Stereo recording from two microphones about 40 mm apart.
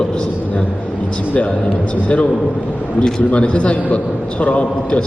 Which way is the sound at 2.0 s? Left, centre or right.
Left.